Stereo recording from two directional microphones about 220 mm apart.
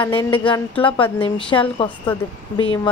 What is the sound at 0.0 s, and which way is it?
A woman's voice, 20° left (ahead or behind).